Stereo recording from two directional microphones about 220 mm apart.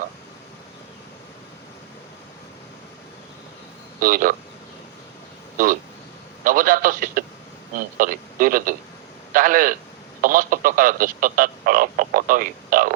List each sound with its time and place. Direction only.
4.0 s speech: 40° right (ahead or behind)
6.4 s a man's voice: 40° right (ahead or behind)